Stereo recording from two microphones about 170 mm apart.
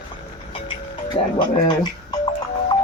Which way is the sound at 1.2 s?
30° left (ahead or behind).